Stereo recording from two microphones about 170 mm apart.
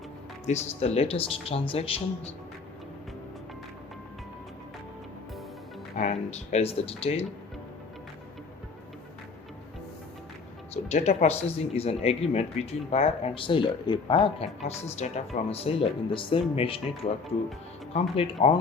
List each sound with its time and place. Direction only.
0.4 s speech: 40° left (ahead or behind)
6.0 s speech: 45° left (ahead or behind)
10.8 s speech: 40° left (ahead or behind)
17.9 s speech: 35° left (ahead or behind)